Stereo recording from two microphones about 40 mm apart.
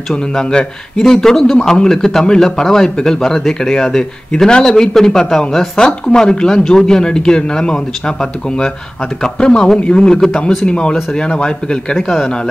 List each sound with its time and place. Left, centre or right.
0.3 s speech: left
0.9 s a man's voice: centre
11.9 s a man's voice: centre